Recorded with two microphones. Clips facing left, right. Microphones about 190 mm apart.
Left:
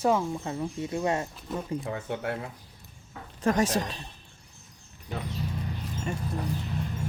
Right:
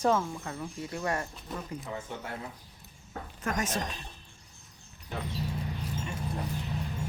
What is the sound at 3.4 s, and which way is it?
Speech, 30° left (ahead or behind).